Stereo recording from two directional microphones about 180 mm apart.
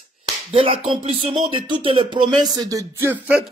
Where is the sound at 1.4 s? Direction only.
30° right (ahead or behind).